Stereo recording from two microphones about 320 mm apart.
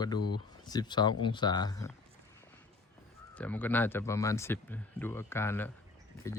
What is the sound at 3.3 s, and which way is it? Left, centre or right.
Speech, centre.